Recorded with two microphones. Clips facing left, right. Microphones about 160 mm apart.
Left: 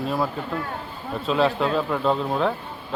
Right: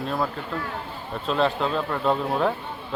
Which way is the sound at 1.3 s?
Centre (ahead or behind).